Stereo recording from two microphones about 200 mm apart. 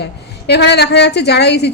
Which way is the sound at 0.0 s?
55° left (ahead or behind).